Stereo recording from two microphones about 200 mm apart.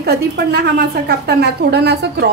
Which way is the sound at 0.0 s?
55° right (ahead or behind).